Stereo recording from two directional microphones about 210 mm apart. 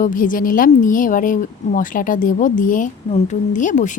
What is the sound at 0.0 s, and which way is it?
A woman's voice, 40° left (ahead or behind).